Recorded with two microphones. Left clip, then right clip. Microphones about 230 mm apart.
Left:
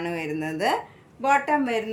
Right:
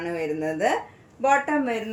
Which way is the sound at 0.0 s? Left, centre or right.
Left.